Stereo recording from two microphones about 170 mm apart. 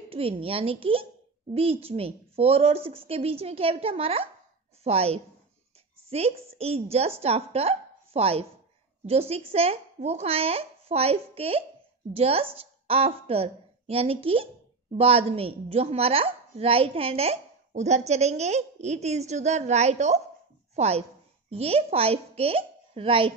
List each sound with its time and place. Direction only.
0.1 s a woman's voice: 35° right (ahead or behind)